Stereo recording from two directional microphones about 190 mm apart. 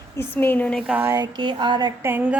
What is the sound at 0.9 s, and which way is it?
A woman's voice, 10° right (ahead or behind).